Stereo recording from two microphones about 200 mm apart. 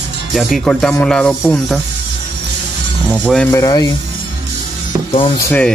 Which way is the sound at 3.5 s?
20° left (ahead or behind).